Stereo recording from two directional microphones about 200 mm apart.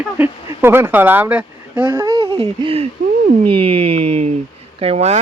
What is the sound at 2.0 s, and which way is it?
Speech, 30° right (ahead or behind).